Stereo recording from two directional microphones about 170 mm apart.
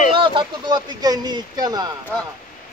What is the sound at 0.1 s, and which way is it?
Speech, 30° right (ahead or behind).